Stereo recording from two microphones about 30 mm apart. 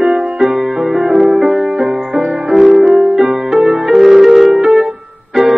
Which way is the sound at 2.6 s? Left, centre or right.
Right.